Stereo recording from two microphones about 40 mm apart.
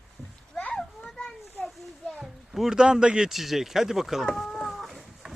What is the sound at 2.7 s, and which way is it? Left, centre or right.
Speech, centre.